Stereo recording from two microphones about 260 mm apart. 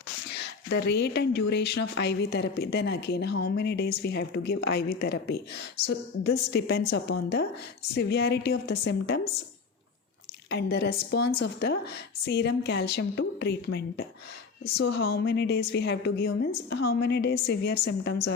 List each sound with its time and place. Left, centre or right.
0.3 s a woman's voice: left
10.5 s a woman's voice: left